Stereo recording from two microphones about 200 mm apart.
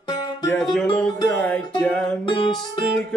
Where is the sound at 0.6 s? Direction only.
Centre (ahead or behind).